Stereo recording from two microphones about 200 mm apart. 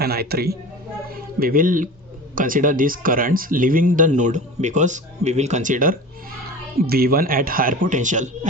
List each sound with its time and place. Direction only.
0.0 s speech: 50° right (ahead or behind)